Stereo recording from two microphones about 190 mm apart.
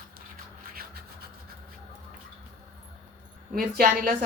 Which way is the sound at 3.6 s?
50° right (ahead or behind).